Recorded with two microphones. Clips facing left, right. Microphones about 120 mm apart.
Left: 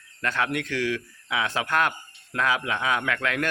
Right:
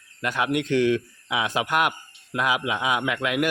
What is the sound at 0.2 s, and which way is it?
A man's voice, 15° right (ahead or behind).